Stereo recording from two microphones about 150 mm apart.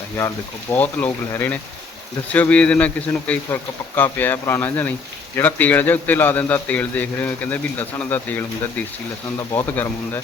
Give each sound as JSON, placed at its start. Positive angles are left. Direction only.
{"t": 0.7, "sound": "speech", "side_deg": 10}